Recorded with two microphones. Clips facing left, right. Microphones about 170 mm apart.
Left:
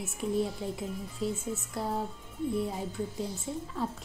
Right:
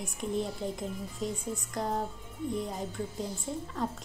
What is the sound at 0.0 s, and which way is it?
A child's voice, 5° left (ahead or behind).